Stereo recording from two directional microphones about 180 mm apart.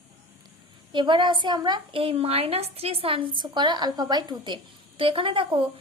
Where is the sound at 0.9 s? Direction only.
25° right (ahead or behind).